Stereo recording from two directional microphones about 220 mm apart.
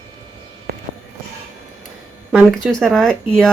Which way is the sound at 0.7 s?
45° right (ahead or behind).